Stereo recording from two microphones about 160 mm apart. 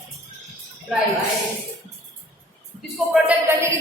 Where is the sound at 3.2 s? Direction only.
15° right (ahead or behind).